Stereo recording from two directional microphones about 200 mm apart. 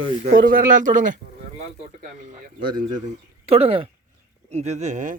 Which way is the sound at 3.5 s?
30° right (ahead or behind).